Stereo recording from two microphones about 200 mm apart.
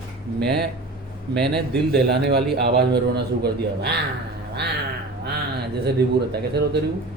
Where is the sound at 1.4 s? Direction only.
55° right (ahead or behind).